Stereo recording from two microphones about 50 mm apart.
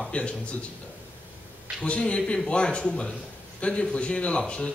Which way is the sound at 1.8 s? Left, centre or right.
Left.